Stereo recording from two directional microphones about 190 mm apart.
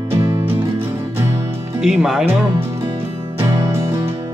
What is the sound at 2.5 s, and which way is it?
Music, 25° right (ahead or behind).